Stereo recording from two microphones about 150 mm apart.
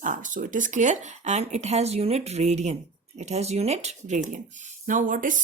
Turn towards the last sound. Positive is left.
turn(degrees=-60)  # may be behind; listen again after turning